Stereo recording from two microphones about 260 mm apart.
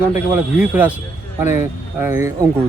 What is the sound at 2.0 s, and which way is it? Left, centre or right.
Speech, centre.